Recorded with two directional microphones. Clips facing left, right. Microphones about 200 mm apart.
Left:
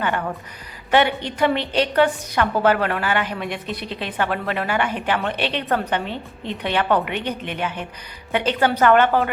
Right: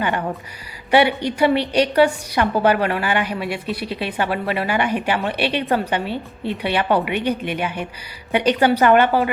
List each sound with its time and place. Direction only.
0.0 s a woman's voice: 15° right (ahead or behind)